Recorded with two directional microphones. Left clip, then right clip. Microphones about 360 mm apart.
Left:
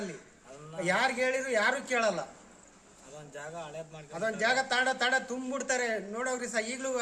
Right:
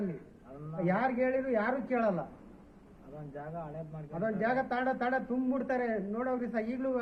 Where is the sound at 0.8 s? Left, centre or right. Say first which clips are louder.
Left 2 dB; centre.